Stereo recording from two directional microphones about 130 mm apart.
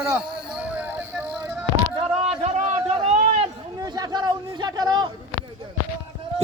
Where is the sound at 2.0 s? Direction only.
50° right (ahead or behind).